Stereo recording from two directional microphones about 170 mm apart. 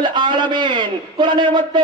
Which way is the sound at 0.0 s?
25° right (ahead or behind).